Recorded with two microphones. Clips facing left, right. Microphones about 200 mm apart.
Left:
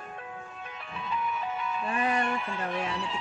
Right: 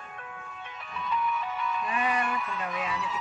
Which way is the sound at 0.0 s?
30° left (ahead or behind).